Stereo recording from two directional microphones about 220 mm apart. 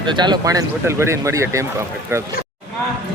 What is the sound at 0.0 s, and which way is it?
Speech, 20° right (ahead or behind).